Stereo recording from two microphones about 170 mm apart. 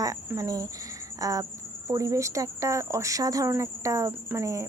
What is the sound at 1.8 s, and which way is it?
Speech, 20° right (ahead or behind).